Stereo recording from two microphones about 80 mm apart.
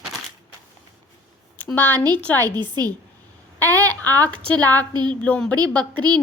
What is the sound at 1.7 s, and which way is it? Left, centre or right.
Speech, left.